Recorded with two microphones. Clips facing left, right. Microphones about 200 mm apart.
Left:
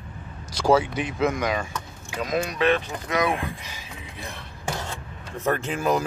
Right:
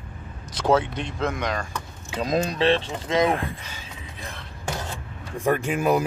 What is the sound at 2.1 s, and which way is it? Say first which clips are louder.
Speech: right 2 dB; 30° right (ahead or behind).